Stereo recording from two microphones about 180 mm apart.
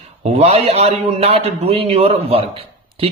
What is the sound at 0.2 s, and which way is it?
A man's voice, 40° right (ahead or behind).